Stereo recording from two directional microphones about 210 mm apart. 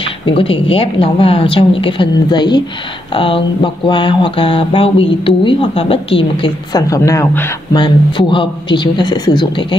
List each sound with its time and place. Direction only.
0.2 s mantra: 25° left (ahead or behind)